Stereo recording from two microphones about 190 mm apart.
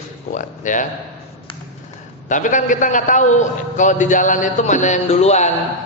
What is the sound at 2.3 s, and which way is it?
A man's voice, 40° left (ahead or behind).